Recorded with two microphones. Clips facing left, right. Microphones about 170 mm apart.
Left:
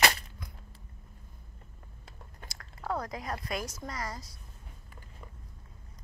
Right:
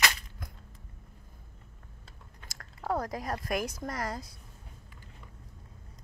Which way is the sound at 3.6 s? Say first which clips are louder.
Right 4 dB; 55° right (ahead or behind).